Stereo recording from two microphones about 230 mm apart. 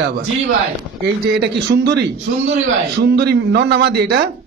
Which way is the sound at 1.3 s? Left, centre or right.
Right.